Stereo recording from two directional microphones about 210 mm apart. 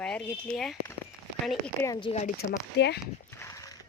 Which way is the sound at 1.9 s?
25° left (ahead or behind).